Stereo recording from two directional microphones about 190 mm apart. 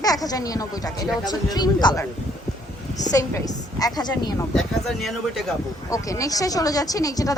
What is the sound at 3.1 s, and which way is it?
Speech, 20° left (ahead or behind).